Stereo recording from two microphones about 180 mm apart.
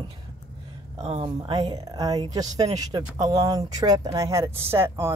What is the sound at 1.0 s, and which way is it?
Speech, 30° right (ahead or behind).